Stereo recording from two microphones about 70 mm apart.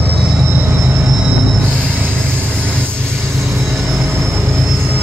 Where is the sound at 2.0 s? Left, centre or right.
Right.